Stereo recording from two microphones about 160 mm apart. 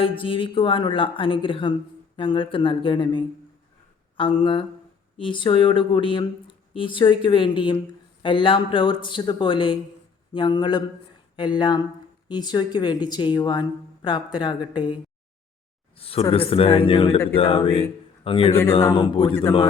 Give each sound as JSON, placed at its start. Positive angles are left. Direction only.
{"t": 0.0, "sound": "speech", "side_deg": 35}
{"t": 16.0, "sound": "a sound", "side_deg": 35}
{"t": 16.3, "sound": "speech", "side_deg": 35}